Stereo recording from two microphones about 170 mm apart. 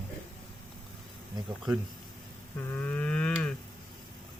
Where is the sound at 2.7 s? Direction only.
10° left (ahead or behind).